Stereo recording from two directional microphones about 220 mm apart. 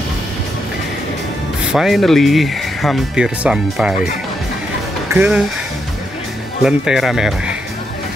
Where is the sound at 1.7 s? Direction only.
Centre (ahead or behind).